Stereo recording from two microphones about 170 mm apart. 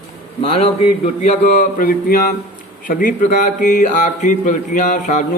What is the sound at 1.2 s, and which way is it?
Speech, 45° left (ahead or behind).